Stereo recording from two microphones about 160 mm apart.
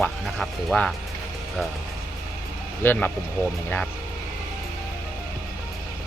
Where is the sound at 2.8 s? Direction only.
10° left (ahead or behind).